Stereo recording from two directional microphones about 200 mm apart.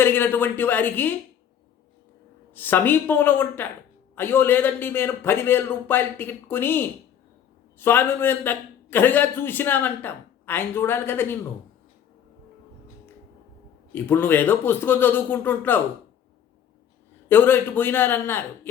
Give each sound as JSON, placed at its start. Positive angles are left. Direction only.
{"t": 0.0, "sound": "a man's voice", "side_deg": 10}
{"t": 2.6, "sound": "a man's voice", "side_deg": 10}
{"t": 13.9, "sound": "a man's voice", "side_deg": 10}
{"t": 17.2, "sound": "a man's voice", "side_deg": 10}